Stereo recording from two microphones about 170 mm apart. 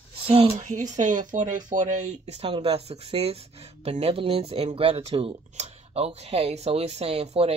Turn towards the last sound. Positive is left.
turn(degrees=-35)  # may be behind; listen again after turning